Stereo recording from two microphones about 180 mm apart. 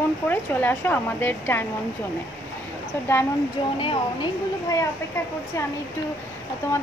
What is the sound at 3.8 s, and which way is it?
Speech, 25° left (ahead or behind).